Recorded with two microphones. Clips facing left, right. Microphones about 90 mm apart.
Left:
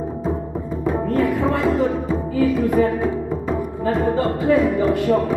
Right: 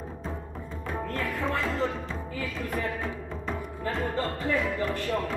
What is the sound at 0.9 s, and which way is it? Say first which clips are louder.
Music: left 11 dB; 20° left (ahead or behind).